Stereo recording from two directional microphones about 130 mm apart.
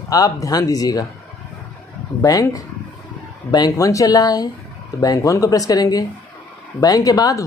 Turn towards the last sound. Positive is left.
turn(degrees=25)  # may be behind; listen again after turning